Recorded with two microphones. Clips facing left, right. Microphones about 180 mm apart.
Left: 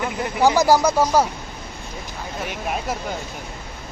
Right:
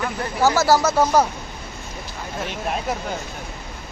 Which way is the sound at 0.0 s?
15° left (ahead or behind).